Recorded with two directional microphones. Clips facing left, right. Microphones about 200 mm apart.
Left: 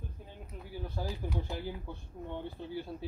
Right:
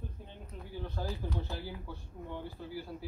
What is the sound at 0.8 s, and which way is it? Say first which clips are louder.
Speech: even; 10° left (ahead or behind).